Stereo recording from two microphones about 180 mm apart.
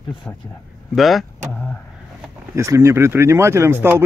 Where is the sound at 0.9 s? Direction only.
Centre (ahead or behind).